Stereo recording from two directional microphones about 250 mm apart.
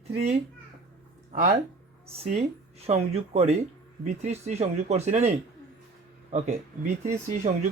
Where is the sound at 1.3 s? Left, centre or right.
Right.